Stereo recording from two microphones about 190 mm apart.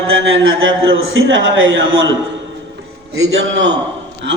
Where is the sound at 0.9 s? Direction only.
90° right.